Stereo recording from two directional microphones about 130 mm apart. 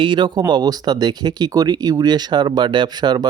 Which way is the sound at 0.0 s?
35° right (ahead or behind).